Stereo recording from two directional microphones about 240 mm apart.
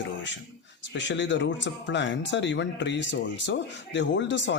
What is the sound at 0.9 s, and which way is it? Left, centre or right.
Speech, left.